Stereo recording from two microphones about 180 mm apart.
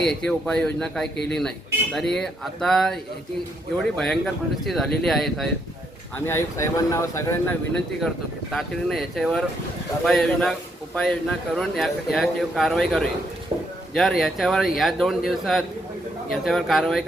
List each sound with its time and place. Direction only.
0.0 s speech: 5° left (ahead or behind)
6.1 s speech: 15° left (ahead or behind)
8.0 s speech: centre (ahead or behind)
13.5 s a sound: 30° right (ahead or behind)
13.9 s speech: centre (ahead or behind)